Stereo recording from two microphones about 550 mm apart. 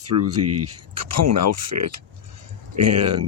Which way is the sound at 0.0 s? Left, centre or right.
Right.